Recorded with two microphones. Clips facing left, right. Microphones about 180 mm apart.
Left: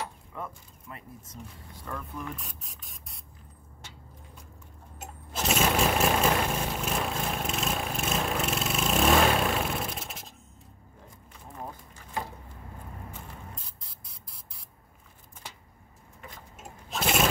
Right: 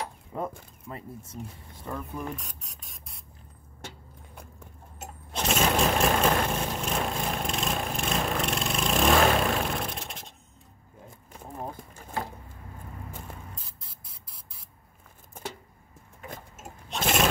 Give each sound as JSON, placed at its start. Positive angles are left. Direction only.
{"t": 0.3, "sound": "speech", "side_deg": -35}
{"t": 1.9, "sound": "speech", "side_deg": -15}
{"t": 2.3, "sound": "speech", "side_deg": 0}
{"t": 4.9, "sound": "lawn mower", "side_deg": 0}
{"t": 13.8, "sound": "spray", "side_deg": 0}
{"t": 16.5, "sound": "lawn mower", "side_deg": 0}